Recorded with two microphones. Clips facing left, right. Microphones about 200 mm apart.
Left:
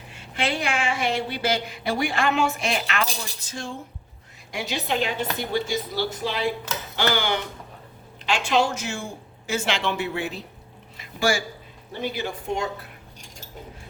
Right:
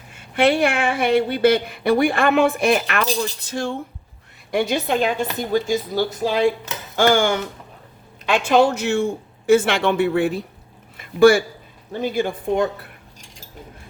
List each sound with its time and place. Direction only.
0.1 s speech: 55° right (ahead or behind)
4.5 s speech: 50° right (ahead or behind)